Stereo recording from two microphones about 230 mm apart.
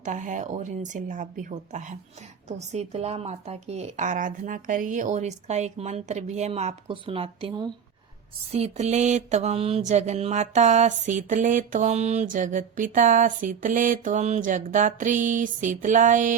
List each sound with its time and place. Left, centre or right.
0.0 s mantra: right
2.5 s speech: right
8.5 s mantra: right